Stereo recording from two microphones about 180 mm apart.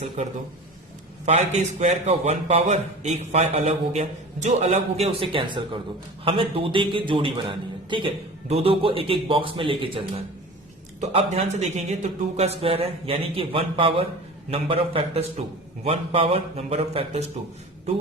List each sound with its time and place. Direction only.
0.2 s a man's voice: 40° right (ahead or behind)